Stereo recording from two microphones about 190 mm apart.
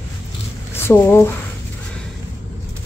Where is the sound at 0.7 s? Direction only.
10° left (ahead or behind).